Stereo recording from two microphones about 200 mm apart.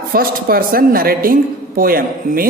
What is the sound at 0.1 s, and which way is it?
A woman's voice, 45° right (ahead or behind).